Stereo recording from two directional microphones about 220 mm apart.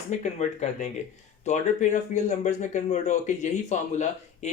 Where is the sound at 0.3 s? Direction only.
30° left (ahead or behind).